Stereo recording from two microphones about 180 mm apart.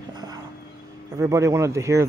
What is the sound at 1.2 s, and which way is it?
Speech, 15° right (ahead or behind).